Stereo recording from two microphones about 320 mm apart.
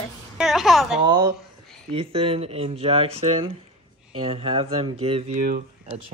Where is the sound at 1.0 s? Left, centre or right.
Centre.